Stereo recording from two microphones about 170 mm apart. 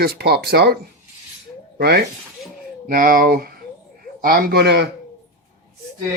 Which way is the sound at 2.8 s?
55° right (ahead or behind).